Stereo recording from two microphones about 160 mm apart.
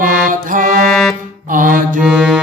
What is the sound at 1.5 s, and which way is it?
Mantra, 55° right (ahead or behind).